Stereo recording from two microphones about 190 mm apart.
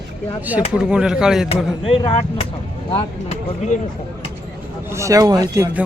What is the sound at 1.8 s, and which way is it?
Speech, 30° left (ahead or behind).